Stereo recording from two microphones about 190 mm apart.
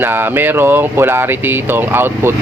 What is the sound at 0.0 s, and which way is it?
Speech, 10° right (ahead or behind).